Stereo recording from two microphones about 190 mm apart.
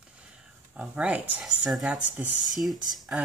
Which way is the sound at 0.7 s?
5° right (ahead or behind).